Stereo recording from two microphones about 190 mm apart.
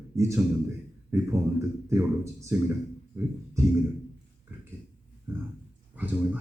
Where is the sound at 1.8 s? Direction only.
15° right (ahead or behind).